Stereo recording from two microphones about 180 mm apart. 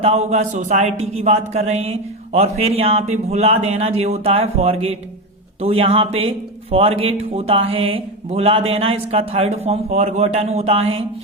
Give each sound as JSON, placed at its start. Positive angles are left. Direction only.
{"t": 0.0, "sound": "speech", "side_deg": -35}